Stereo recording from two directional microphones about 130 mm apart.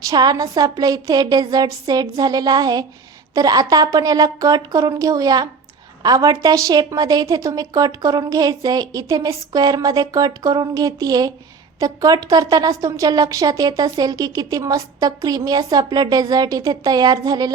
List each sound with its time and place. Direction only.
0.1 s a woman's voice: 30° right (ahead or behind)